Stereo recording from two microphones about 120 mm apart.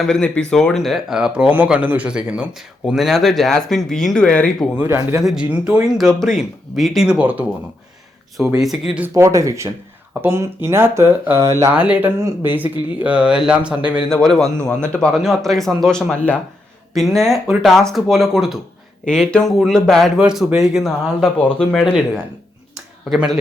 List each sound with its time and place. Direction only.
0.0 s speech: 5° left (ahead or behind)
4.8 s speech: 20° right (ahead or behind)
5.2 s speech: 5° right (ahead or behind)
8.6 s speech: 5° right (ahead or behind)
9.1 s speech: 25° right (ahead or behind)
11.7 s speech: 10° right (ahead or behind)
14.1 s speech: 5° left (ahead or behind)
20.1 s speech: 5° right (ahead or behind)
23.0 s speech: 5° right (ahead or behind)